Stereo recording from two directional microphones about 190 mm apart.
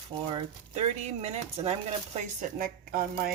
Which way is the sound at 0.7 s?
35° right (ahead or behind).